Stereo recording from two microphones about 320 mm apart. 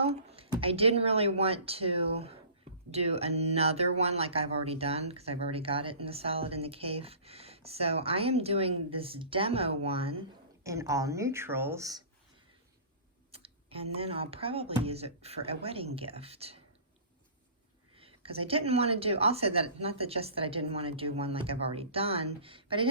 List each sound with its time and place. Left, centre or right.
0.0 s speech: centre
13.3 s tick-tock: centre
13.9 s speech: centre
17.9 s speech: centre